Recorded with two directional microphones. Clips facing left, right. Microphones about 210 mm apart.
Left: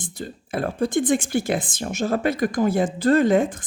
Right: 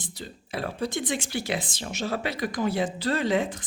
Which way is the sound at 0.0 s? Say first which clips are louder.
Left 7 dB; 50° left (ahead or behind).